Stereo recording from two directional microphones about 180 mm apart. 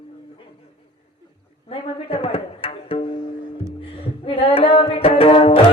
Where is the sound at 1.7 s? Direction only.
30° left (ahead or behind).